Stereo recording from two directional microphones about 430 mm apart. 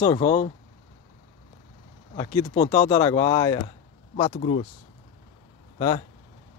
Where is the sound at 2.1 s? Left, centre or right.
Centre.